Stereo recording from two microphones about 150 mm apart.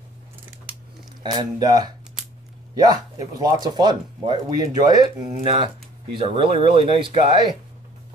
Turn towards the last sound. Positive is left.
turn(degrees=-30)  # may be behind; listen again after turning